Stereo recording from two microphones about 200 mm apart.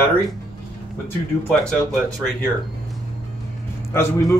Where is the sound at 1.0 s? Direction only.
5° left (ahead or behind).